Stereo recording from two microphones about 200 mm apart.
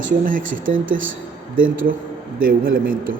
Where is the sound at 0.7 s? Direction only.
75° right (ahead or behind).